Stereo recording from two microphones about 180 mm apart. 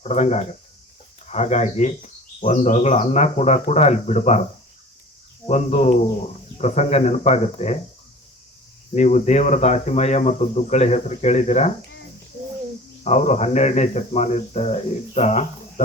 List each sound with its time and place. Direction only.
0.0 s speech: 40° left (ahead or behind)
5.5 s speech: 40° left (ahead or behind)
9.0 s speech: 40° left (ahead or behind)
13.1 s speech: 40° left (ahead or behind)